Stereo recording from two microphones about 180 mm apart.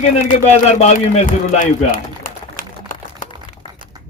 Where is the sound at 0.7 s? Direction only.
35° left (ahead or behind).